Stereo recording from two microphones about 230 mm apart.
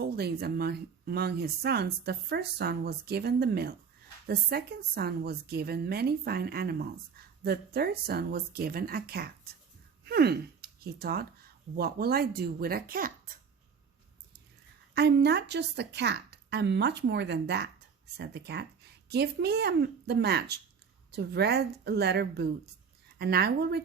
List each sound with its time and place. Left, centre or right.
0.0 s speech: right
14.9 s speech: right